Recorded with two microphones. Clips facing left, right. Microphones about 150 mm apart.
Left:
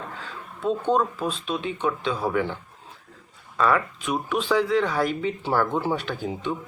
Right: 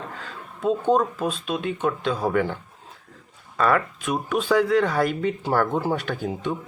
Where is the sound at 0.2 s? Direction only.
45° right (ahead or behind).